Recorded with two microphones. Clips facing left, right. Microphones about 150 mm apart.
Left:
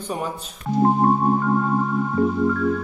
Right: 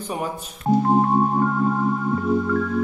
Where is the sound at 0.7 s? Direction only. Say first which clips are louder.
Right 5 dB; 35° right (ahead or behind).